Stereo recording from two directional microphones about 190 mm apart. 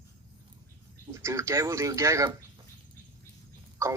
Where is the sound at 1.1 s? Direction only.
15° right (ahead or behind).